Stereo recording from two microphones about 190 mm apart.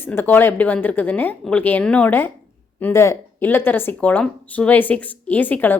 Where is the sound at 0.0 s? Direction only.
10° left (ahead or behind).